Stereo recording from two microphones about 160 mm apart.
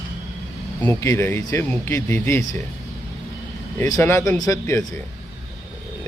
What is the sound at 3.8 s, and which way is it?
Speech, 20° left (ahead or behind).